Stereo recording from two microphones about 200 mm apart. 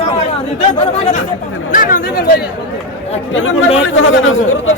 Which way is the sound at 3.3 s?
75° left (ahead or behind).